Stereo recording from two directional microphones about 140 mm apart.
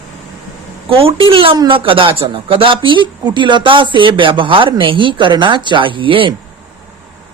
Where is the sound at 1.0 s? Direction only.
40° right (ahead or behind).